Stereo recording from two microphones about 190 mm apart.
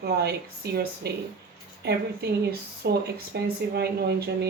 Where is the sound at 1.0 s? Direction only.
55° right (ahead or behind).